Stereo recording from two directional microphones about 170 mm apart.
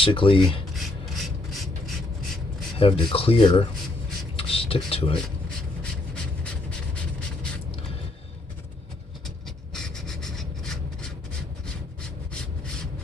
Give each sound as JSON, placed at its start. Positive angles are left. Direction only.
{"t": 0.0, "sound": "speech", "side_deg": 30}
{"t": 0.7, "sound": "rub", "side_deg": 0}
{"t": 2.8, "sound": "speech", "side_deg": 35}
{"t": 4.4, "sound": "a sound", "side_deg": 35}
{"t": 5.8, "sound": "a sound", "side_deg": 5}
{"t": 9.8, "sound": "rub", "side_deg": 5}